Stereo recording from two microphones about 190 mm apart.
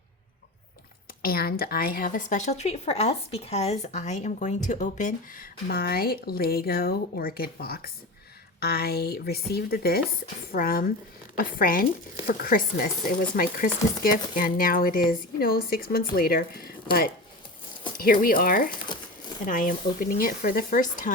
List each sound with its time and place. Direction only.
1.2 s a woman's voice: 50° left (ahead or behind)
17.9 s a woman's voice: 50° left (ahead or behind)